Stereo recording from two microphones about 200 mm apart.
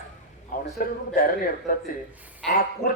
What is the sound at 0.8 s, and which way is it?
Speech, 45° left (ahead or behind).